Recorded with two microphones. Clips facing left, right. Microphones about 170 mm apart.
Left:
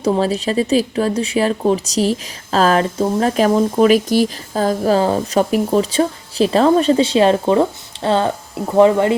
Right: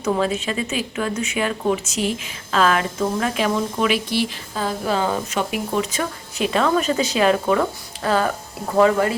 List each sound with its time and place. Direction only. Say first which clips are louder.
0.0 s speech: left 4 dB; 35° left (ahead or behind)